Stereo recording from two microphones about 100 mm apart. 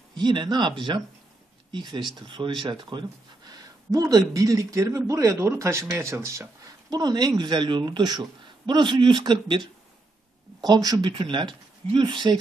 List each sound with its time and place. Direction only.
0.2 s speech: 50° right (ahead or behind)
3.5 s a man's voice: 35° right (ahead or behind); by 9.6 s 50° right (ahead or behind)
10.6 s speech: 40° right (ahead or behind)